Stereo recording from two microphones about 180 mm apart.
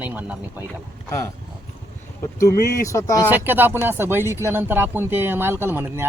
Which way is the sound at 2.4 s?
15° left (ahead or behind).